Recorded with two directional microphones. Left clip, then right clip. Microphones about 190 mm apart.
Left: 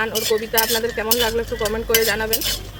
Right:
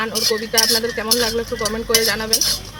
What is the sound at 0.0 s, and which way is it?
Speech, 15° left (ahead or behind).